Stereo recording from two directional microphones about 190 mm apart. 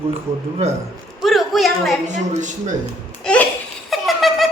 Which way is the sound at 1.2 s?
Centre (ahead or behind).